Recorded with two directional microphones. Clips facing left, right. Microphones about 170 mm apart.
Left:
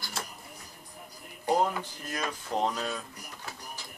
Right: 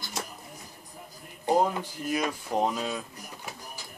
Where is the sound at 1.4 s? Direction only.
15° right (ahead or behind).